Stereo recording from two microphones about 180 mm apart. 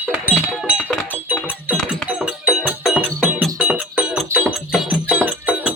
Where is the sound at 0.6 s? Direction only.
Centre (ahead or behind).